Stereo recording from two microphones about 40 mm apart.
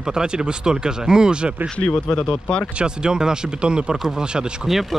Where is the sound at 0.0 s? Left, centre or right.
Centre.